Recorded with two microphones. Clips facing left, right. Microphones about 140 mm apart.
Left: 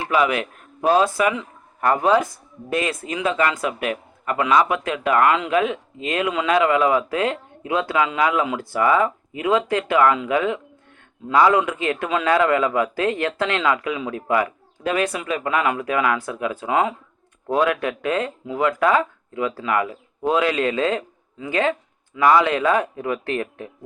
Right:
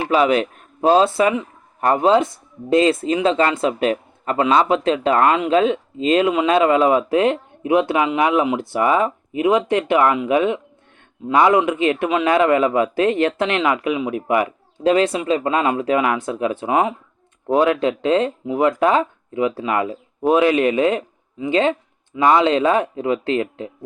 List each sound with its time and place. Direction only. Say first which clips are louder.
0.1 s speech: right 4 dB; 25° right (ahead or behind)